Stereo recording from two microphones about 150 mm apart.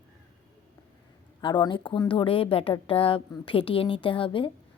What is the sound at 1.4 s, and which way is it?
A woman's voice, 30° left (ahead or behind).